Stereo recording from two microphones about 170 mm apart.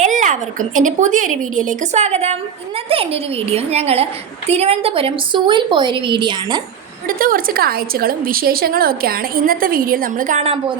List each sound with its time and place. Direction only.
0.0 s a woman's voice: 45° right (ahead or behind); by 6.6 s 30° right (ahead or behind)
7.1 s a woman's voice: 55° right (ahead or behind); by 10.6 s 40° right (ahead or behind)